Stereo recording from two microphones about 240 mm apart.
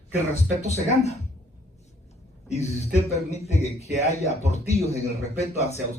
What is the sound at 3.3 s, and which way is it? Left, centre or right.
A man's voice, left.